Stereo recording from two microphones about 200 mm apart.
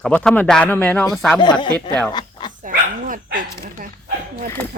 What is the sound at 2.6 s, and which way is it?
Speech, 40° right (ahead or behind).